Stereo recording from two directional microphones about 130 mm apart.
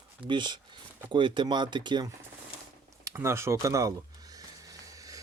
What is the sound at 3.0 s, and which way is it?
Speech, 20° right (ahead or behind).